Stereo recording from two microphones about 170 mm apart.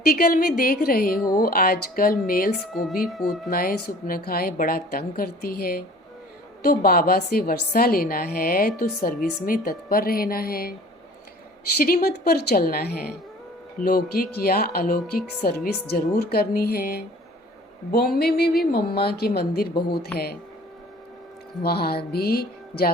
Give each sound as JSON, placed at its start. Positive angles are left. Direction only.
{"t": 0.0, "sound": "a woman's voice", "side_deg": 60}
{"t": 2.7, "sound": "speech", "side_deg": 0}
{"t": 3.5, "sound": "a woman's voice", "side_deg": 55}
{"t": 12.0, "sound": "a woman's voice", "side_deg": 70}
{"t": 21.6, "sound": "a woman's voice", "side_deg": 65}